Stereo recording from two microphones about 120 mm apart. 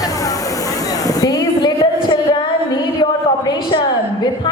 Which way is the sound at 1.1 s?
30° left (ahead or behind).